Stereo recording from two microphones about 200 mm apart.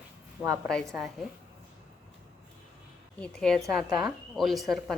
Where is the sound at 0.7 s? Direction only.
5° left (ahead or behind).